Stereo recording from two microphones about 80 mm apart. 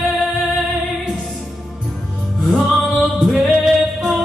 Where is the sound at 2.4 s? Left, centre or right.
Centre.